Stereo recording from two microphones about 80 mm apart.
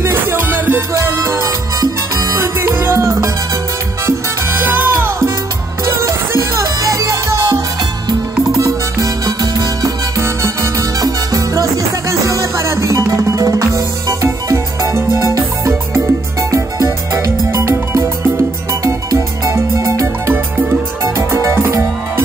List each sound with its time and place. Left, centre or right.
0.0 s music: right
4.0 s salsa music: right
5.9 s music: right
10.1 s music: right
11.0 s music: right
15.0 s music: left
15.3 s music: right